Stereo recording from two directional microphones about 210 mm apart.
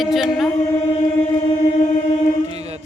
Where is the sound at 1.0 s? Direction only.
30° left (ahead or behind).